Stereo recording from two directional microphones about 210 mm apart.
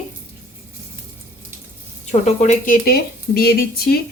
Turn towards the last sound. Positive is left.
turn(degrees=50)  # may be behind; listen again after turning